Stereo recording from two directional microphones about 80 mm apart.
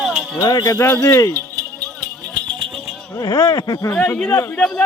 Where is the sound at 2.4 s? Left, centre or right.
Right.